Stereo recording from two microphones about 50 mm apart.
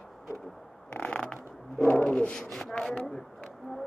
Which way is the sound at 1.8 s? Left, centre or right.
Left.